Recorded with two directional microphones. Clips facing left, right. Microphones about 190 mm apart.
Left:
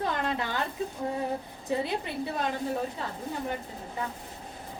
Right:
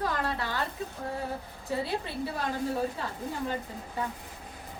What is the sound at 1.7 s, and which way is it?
Speech, 20° left (ahead or behind).